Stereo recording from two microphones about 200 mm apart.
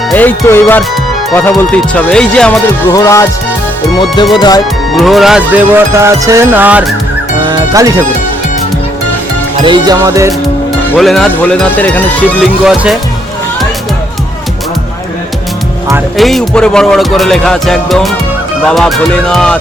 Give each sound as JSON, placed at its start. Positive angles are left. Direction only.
{"t": 0.1, "sound": "speech", "side_deg": 10}
{"t": 2.9, "sound": "speech", "side_deg": 15}
{"t": 3.9, "sound": "music", "side_deg": 20}
{"t": 4.9, "sound": "music", "side_deg": 0}
{"t": 9.6, "sound": "music", "side_deg": -20}
{"t": 10.9, "sound": "speech", "side_deg": 0}
{"t": 16.1, "sound": "speech", "side_deg": 0}